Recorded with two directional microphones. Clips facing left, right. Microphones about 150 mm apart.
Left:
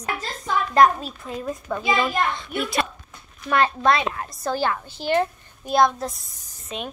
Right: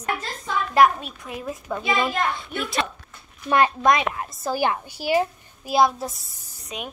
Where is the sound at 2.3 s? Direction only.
10° right (ahead or behind).